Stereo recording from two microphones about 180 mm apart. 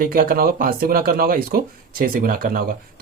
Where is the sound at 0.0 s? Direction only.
55° right (ahead or behind).